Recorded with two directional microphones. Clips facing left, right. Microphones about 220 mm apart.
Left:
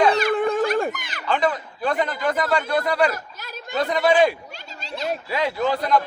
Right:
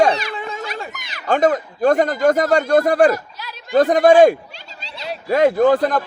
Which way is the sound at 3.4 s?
50° left (ahead or behind).